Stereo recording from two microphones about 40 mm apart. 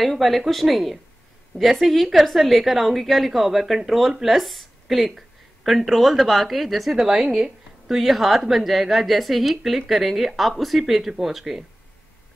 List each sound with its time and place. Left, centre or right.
0.0 s a woman's voice: centre
7.9 s a woman's voice: centre